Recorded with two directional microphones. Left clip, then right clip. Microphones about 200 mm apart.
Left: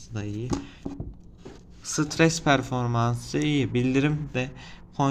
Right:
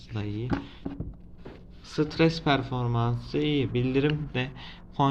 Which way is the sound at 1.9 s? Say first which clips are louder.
Left 2 dB; 25° left (ahead or behind).